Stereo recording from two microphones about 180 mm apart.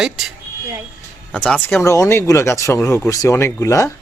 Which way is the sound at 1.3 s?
10° left (ahead or behind).